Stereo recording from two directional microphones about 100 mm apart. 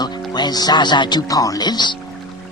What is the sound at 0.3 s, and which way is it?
Speech, 45° left (ahead or behind).